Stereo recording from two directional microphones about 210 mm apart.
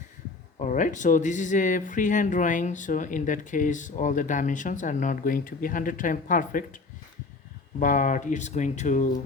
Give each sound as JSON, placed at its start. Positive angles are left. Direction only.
{"t": 0.6, "sound": "speech", "side_deg": 35}
{"t": 7.8, "sound": "speech", "side_deg": 40}